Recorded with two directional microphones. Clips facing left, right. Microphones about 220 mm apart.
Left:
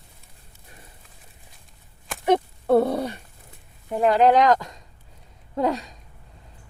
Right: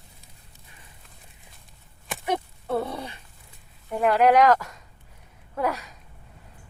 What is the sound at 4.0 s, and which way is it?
A woman's voice, 25° left (ahead or behind).